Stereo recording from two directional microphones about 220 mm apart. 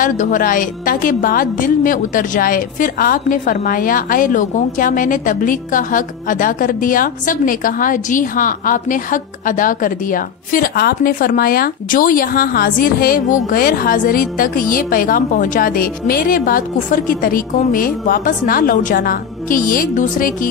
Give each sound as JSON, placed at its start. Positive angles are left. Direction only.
{"t": 0.0, "sound": "a woman's voice", "side_deg": 35}